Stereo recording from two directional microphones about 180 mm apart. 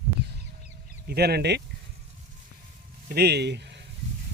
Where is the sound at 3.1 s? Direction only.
65° right (ahead or behind).